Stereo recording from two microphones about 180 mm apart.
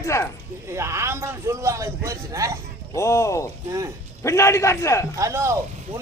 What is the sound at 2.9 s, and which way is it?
Speech, 15° left (ahead or behind).